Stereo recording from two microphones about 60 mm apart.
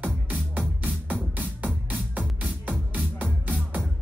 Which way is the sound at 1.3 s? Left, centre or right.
Right.